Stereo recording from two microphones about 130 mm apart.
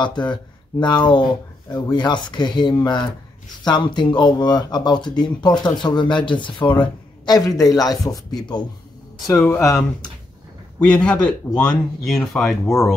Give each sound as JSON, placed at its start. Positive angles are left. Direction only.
{"t": 0.0, "sound": "speech", "side_deg": 35}
{"t": 10.8, "sound": "speech", "side_deg": 10}